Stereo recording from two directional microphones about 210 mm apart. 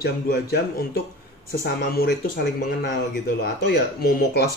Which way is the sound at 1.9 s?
50° left (ahead or behind).